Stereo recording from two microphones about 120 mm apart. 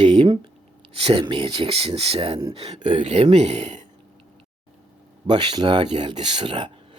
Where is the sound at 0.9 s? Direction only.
50° right (ahead or behind); by 3.8 s 70° right (ahead or behind).